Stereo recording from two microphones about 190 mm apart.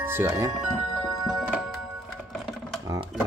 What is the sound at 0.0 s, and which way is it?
Speech, 10° right (ahead or behind).